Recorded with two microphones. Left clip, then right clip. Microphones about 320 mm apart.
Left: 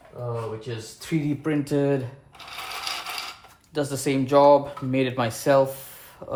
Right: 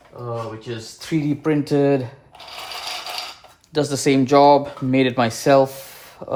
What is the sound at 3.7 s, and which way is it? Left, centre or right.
Speech, right.